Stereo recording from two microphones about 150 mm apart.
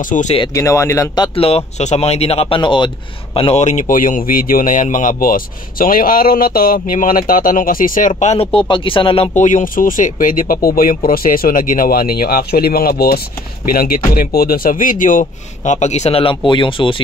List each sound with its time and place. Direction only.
0.0 s speech: 55° left (ahead or behind)
0.5 s speech: 20° left (ahead or behind)
1.3 s speech: 40° left (ahead or behind)
3.5 s speech: 50° left (ahead or behind); by 9.3 s 35° left (ahead or behind)
9.3 s speech: 55° left (ahead or behind); by 13.2 s 90° left
13.7 s speech: 75° left (ahead or behind); by 17.0 s 35° left (ahead or behind)